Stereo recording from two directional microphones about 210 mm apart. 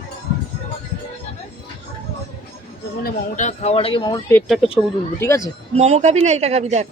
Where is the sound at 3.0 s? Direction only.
35° left (ahead or behind); by 4.4 s 20° left (ahead or behind).